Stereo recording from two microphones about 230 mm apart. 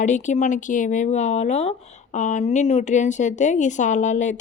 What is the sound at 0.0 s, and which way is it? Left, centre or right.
Speech, left.